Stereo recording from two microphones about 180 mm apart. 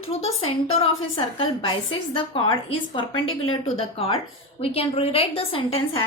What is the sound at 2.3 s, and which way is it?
A woman's voice, 30° left (ahead or behind).